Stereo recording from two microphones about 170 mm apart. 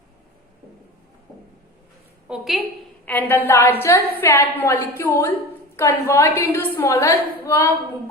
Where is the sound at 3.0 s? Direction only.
10° left (ahead or behind).